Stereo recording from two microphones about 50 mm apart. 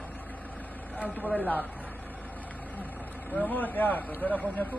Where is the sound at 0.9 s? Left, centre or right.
Left.